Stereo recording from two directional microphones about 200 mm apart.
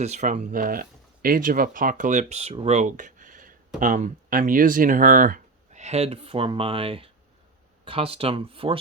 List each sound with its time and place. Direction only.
0.0 s speech: 35° right (ahead or behind)